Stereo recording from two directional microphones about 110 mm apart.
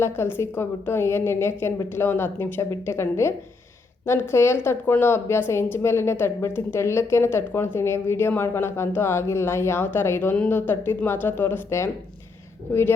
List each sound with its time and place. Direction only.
0.0 s a woman's voice: 20° left (ahead or behind)